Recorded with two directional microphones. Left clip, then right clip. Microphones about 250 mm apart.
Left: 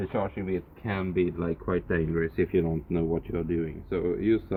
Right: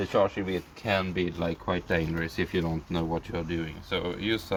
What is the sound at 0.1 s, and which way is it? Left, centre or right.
Speech, right.